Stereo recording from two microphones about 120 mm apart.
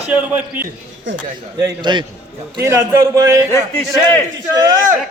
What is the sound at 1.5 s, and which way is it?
Speech, 35° right (ahead or behind).